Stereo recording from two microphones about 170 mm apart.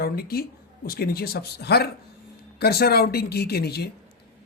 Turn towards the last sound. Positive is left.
turn(degrees=70)  # may be behind; listen again after turning